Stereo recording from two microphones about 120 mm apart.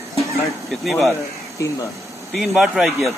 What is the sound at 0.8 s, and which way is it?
Speech, centre (ahead or behind).